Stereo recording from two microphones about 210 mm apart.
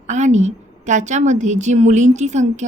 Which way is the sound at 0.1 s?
35° right (ahead or behind).